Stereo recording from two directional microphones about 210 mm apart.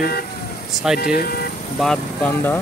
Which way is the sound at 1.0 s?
45° left (ahead or behind).